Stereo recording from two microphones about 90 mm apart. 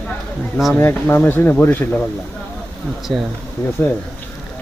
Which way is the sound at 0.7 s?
25° left (ahead or behind).